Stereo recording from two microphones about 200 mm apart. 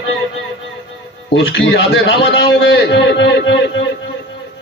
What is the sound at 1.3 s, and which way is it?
A man's voice, 65° left (ahead or behind).